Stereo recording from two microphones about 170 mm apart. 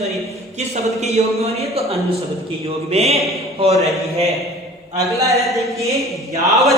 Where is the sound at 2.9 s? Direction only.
40° right (ahead or behind).